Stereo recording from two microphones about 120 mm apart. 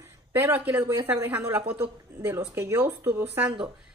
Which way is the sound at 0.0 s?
20° right (ahead or behind).